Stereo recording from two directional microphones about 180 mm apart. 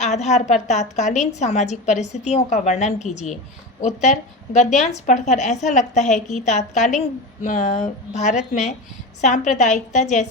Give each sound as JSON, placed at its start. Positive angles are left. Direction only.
{"t": 0.0, "sound": "a woman's voice", "side_deg": 40}